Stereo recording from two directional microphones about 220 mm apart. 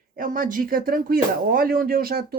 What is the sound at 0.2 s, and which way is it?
Speech, 35° right (ahead or behind).